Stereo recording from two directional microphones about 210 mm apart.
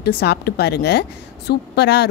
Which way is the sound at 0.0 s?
50° left (ahead or behind).